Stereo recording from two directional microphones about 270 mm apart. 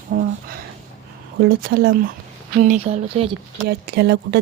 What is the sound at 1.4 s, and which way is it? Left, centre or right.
Speech, right.